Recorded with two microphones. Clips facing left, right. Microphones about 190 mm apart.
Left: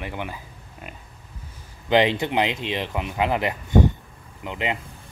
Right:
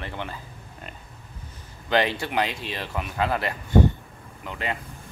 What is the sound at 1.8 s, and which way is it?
Speech, 20° left (ahead or behind).